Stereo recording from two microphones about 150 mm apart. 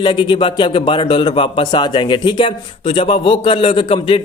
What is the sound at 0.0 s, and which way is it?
A man's voice, 30° left (ahead or behind).